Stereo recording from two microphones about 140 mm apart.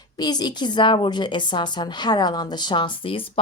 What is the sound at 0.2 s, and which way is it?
Speech, 30° left (ahead or behind).